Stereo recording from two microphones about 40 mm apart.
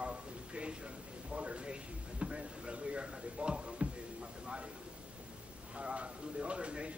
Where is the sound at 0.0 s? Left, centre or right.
Right.